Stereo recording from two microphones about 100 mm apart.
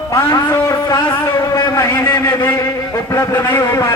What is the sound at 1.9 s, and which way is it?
Speech, 25° left (ahead or behind).